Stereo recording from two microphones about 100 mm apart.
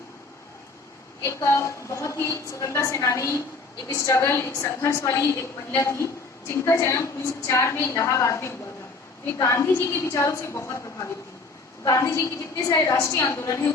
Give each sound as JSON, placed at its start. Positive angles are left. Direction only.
{"t": 1.2, "sound": "a woman's voice", "side_deg": 30}